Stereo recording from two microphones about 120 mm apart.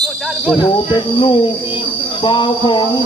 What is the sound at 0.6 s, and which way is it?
Speech, 40° left (ahead or behind).